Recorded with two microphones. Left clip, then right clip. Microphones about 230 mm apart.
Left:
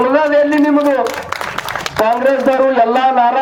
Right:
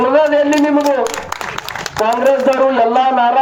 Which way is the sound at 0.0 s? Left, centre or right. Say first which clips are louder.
Even; left.